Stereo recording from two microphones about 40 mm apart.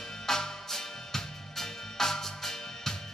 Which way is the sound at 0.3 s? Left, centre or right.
Centre.